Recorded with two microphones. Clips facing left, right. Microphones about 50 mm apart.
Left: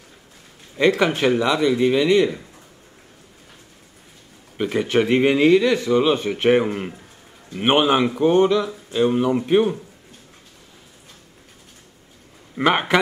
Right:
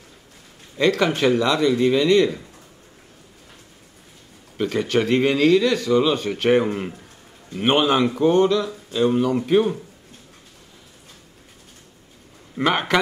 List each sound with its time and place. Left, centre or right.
0.7 s a man's voice: centre
4.6 s speech: centre
6.6 s a man's voice: centre
7.5 s a man's voice: centre
12.5 s a man's voice: centre